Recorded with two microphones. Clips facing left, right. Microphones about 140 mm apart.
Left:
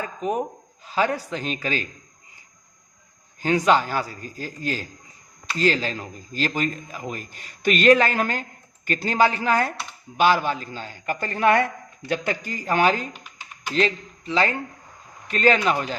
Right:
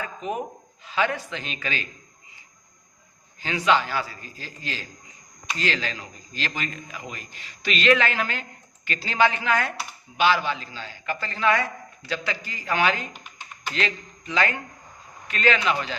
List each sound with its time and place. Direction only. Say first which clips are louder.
0.0 s a man's voice: left 4 dB; 40° left (ahead or behind)
3.4 s a man's voice: left 3 dB; 45° left (ahead or behind)